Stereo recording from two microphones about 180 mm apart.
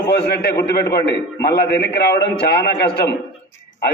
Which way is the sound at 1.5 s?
65° left (ahead or behind).